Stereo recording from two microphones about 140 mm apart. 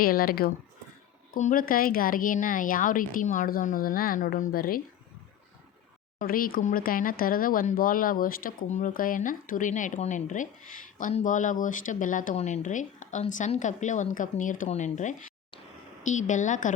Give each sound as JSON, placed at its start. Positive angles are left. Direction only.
{"t": 0.0, "sound": "speech", "side_deg": 90}
{"t": 1.3, "sound": "speech", "side_deg": 75}
{"t": 6.1, "sound": "speech", "side_deg": 90}
{"t": 14.7, "sound": "speech", "side_deg": 60}